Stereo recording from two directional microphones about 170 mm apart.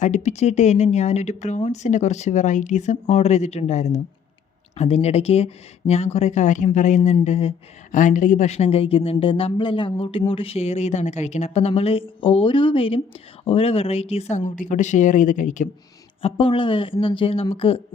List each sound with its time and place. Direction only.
0.0 s speech: 45° left (ahead or behind)
16.2 s speech: 30° left (ahead or behind)